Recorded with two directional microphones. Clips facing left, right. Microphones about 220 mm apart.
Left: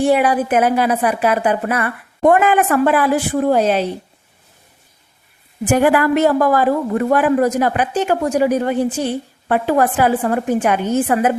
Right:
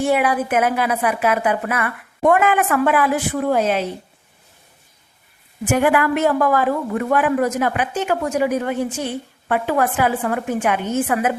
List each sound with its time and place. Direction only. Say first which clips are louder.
0.0 s a woman's voice: left 4 dB; 35° left (ahead or behind)
5.6 s a woman's voice: left 3 dB; 35° left (ahead or behind)